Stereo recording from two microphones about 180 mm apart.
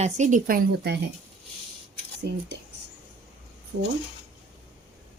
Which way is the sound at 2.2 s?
65° right (ahead or behind).